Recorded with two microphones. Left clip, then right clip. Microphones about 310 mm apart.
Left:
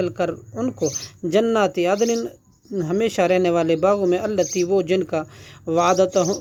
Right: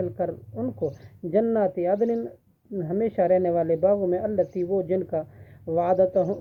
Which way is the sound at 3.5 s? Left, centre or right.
Left.